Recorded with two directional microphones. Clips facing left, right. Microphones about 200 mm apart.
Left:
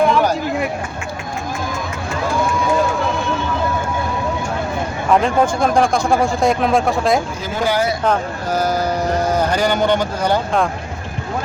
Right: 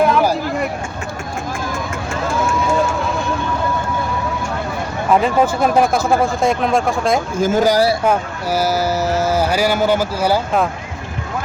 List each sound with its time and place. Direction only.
0.0 s a sound: 5° right (ahead or behind)
5.1 s speech: 5° right (ahead or behind)
7.3 s speech: 45° right (ahead or behind)
8.0 s speech: 10° right (ahead or behind)